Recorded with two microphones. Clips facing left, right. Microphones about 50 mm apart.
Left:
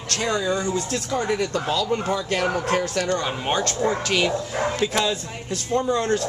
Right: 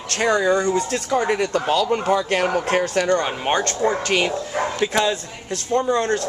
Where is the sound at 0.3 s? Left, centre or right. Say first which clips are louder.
Right 6 dB; right.